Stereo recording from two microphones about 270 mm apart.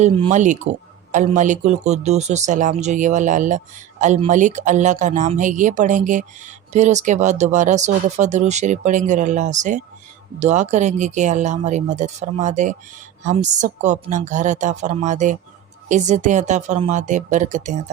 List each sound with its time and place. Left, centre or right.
0.0 s speech: right